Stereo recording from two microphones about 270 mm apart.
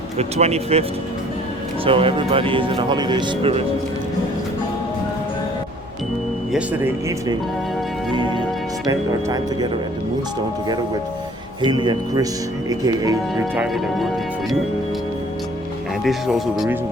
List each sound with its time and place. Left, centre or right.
0.2 s speech: right
6.5 s speech: centre
8.1 s music: centre
8.9 s speech: centre
11.6 s speech: centre
13.6 s speech: centre
16.0 s speech: centre